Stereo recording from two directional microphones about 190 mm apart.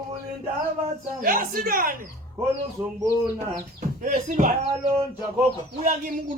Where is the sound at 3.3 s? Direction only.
40° right (ahead or behind).